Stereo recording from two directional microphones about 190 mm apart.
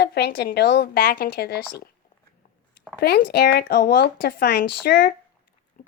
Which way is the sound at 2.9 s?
60° left (ahead or behind).